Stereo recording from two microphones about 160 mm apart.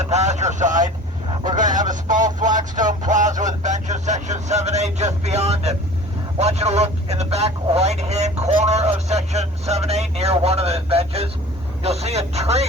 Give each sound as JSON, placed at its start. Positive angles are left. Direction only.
{"t": 0.1, "sound": "vehicle", "side_deg": -45}
{"t": 1.5, "sound": "a sound", "side_deg": -50}
{"t": 3.1, "sound": "vehicle", "side_deg": -50}
{"t": 11.8, "sound": "speech", "side_deg": -40}